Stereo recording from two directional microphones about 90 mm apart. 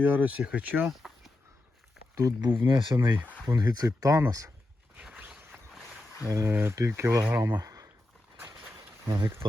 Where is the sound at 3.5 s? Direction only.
45° right (ahead or behind).